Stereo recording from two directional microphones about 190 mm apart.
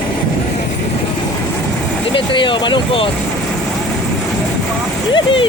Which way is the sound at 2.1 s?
25° left (ahead or behind).